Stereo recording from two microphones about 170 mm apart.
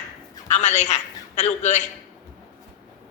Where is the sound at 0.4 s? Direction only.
45° left (ahead or behind).